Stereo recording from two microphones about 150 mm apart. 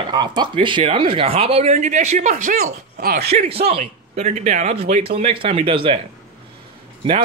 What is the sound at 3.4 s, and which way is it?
Speech, 40° right (ahead or behind).